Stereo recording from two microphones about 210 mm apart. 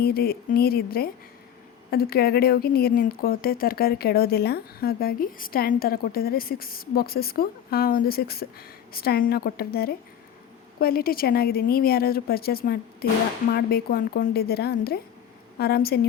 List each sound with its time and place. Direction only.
0.0 s speech: 45° left (ahead or behind)